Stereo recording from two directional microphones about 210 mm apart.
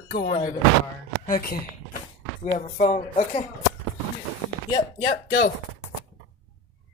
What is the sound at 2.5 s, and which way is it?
Speech, 35° left (ahead or behind).